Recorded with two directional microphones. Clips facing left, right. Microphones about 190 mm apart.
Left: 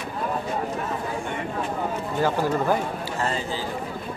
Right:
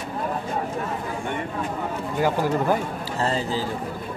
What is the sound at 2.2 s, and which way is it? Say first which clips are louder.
Speech: right 1 dB; 15° right (ahead or behind).